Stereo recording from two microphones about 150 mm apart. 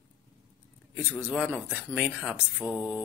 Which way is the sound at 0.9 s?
10° right (ahead or behind).